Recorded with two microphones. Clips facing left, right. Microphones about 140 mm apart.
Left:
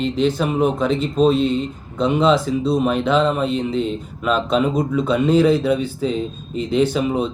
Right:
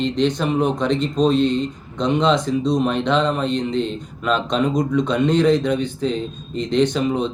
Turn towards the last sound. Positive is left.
turn(degrees=5)  # may be behind; listen again after turning